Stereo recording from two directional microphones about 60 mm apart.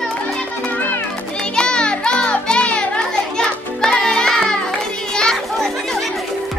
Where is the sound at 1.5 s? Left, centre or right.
Centre.